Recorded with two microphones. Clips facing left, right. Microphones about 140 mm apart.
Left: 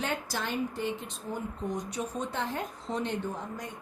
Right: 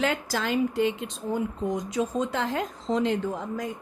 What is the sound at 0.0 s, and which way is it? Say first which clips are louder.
A woman's voice: right 6 dB; 90° right.